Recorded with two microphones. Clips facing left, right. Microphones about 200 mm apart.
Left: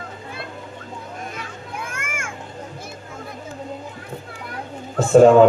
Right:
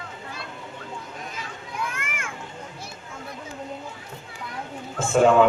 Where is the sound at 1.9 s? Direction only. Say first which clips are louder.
Left 3 dB; 45° left (ahead or behind).